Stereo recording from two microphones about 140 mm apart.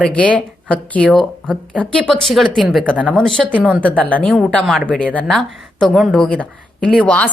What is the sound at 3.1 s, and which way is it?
A woman's voice, 5° left (ahead or behind).